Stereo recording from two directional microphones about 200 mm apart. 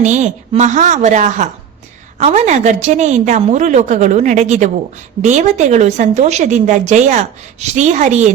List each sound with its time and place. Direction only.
0.0 s a woman's voice: 35° right (ahead or behind)